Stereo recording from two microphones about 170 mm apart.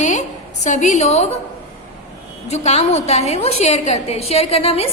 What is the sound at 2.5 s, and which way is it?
A woman's voice, 40° left (ahead or behind).